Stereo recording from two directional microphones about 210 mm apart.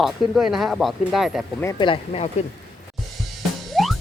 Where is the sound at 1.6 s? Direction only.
20° left (ahead or behind).